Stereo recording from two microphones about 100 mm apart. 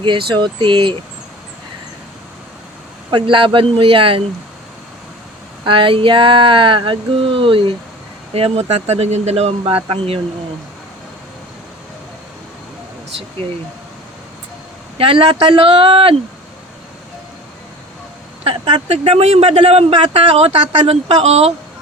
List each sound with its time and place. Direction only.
0.0 s speech: 55° right (ahead or behind)
3.1 s speech: 55° right (ahead or behind)
5.6 s speech: 60° right (ahead or behind)
8.3 s speech: 85° right
14.9 s speech: 65° right (ahead or behind)
18.4 s speech: 85° right